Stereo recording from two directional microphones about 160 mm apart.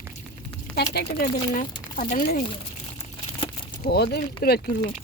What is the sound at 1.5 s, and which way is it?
Speech, 55° left (ahead or behind).